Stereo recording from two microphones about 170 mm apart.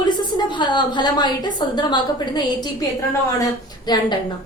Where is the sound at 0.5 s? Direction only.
25° left (ahead or behind).